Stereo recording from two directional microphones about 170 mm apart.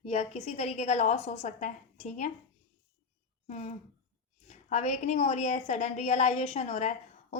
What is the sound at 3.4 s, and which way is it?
A woman's voice, 40° left (ahead or behind).